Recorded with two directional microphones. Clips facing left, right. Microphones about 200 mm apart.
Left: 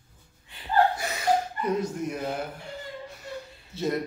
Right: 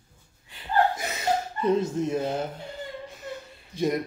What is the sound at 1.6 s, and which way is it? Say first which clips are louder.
Dog: right 4 dB; 25° right (ahead or behind).